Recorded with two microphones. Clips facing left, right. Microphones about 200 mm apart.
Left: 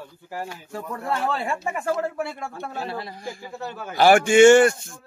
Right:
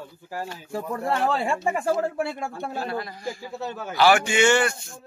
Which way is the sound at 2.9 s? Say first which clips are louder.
Right 2 dB; 30° left (ahead or behind).